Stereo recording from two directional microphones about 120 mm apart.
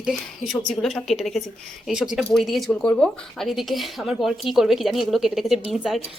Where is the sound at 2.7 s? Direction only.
15° left (ahead or behind).